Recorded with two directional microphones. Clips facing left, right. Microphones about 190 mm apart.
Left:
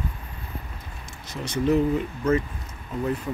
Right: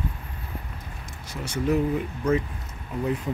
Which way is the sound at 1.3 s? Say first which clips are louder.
Left 2 dB; 10° right (ahead or behind).